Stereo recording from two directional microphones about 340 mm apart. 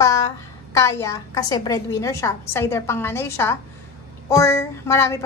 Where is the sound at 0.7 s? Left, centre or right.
Centre.